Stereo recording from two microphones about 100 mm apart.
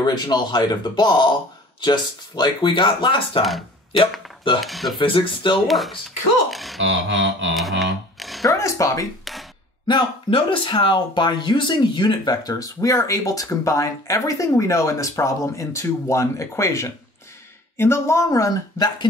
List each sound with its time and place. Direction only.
0.0 s speech: 45° left (ahead or behind)
4.6 s speech: centre (ahead or behind)
4.9 s speech: 60° left (ahead or behind)
5.7 s speech: centre (ahead or behind)
8.5 s speech: 30° left (ahead or behind)
9.2 s a sound: centre (ahead or behind)
9.8 s speech: 55° left (ahead or behind); by 19.0 s 40° left (ahead or behind)